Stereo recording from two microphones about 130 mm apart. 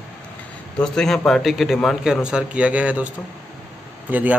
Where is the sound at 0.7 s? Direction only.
5° left (ahead or behind).